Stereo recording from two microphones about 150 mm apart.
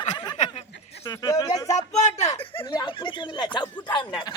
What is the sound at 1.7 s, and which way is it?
Speech, 50° left (ahead or behind).